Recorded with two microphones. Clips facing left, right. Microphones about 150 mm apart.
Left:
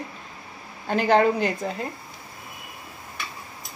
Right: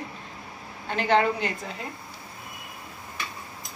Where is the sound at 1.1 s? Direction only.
45° left (ahead or behind).